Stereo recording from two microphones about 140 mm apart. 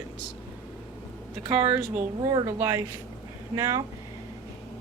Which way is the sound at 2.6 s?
20° right (ahead or behind).